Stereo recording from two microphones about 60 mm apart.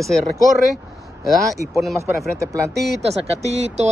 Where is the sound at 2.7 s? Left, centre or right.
Centre.